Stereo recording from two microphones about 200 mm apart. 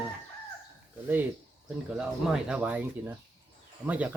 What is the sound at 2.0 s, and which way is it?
Speech, 5° right (ahead or behind).